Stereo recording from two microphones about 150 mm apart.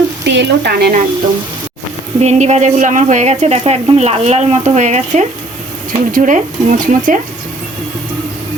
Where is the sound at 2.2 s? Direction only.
50° right (ahead or behind).